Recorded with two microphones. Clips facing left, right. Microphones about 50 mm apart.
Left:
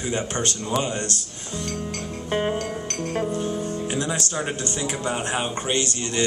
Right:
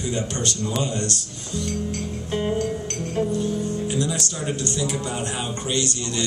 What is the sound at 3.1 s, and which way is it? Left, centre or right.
A man's voice, left.